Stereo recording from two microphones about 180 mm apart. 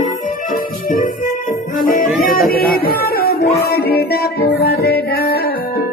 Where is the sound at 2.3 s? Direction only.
55° left (ahead or behind).